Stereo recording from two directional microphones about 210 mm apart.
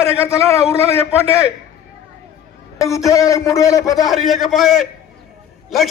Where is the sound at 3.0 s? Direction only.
15° left (ahead or behind).